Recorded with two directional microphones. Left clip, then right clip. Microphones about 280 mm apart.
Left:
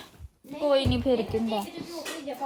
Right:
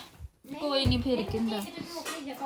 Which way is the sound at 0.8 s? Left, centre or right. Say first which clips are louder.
Left 2 dB; centre.